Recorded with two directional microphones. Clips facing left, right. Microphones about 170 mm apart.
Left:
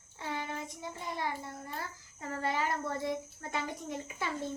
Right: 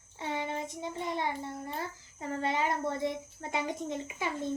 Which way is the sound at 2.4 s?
20° right (ahead or behind).